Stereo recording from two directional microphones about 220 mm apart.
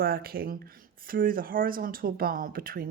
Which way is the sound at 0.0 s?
45° right (ahead or behind).